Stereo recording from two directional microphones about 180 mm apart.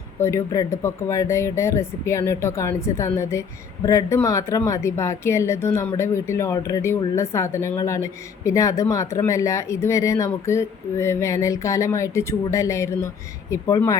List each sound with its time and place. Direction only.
0.2 s speech: 15° left (ahead or behind)